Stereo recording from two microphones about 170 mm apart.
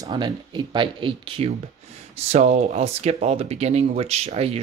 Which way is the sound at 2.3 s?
40° right (ahead or behind).